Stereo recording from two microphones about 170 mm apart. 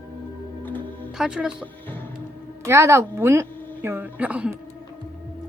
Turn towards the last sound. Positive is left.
turn(degrees=-10)  # may be behind; listen again after turning